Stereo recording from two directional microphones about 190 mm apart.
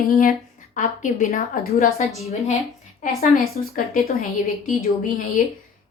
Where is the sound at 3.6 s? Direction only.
50° left (ahead or behind).